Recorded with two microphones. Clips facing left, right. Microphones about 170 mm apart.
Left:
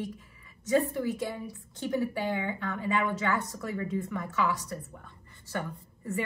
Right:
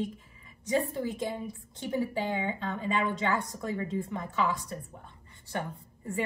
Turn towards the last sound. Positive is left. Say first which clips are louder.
# left 2 dB
turn(degrees=-20)  # may be behind; listen again after turning